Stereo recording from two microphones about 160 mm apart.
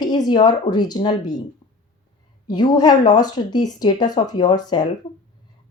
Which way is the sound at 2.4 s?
25° left (ahead or behind).